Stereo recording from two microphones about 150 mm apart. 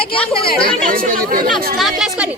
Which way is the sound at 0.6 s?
65° right (ahead or behind).